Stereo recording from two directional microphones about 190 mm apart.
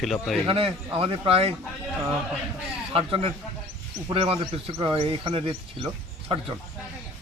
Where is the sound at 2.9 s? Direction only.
30° right (ahead or behind).